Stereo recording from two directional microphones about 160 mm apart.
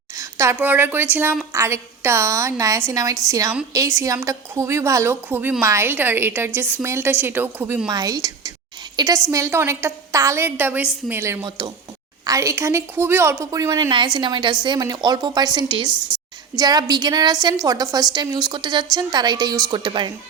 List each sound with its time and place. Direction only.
0.2 s a woman's voice: 20° right (ahead or behind)
11.4 s speech: 25° right (ahead or behind)